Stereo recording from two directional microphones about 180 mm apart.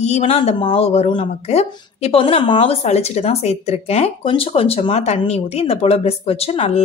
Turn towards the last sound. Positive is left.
turn(degrees=35)  # may be behind; listen again after turning